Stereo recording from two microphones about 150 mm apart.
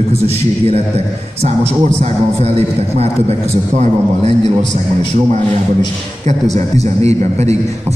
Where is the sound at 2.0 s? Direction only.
45° right (ahead or behind).